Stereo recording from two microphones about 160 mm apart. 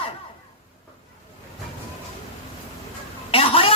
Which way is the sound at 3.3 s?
35° left (ahead or behind).